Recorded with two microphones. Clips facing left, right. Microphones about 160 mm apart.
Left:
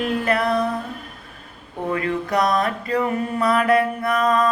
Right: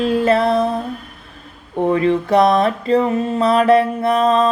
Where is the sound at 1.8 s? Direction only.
25° right (ahead or behind).